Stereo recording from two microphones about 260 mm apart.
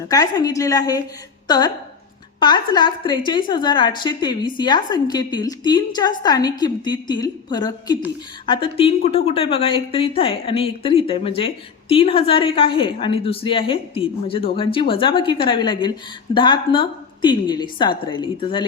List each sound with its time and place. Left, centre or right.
0.1 s a woman's voice: centre